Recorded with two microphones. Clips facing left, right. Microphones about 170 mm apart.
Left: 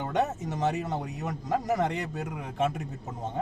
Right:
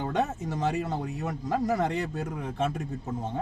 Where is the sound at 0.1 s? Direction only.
20° left (ahead or behind).